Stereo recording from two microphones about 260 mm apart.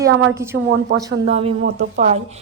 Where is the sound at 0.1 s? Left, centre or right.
Right.